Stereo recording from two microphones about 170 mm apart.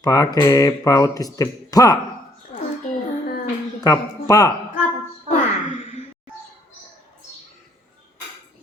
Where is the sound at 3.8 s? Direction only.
20° left (ahead or behind).